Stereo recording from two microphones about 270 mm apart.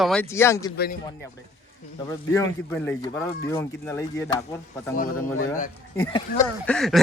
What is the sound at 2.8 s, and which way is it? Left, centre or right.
A man's voice, centre.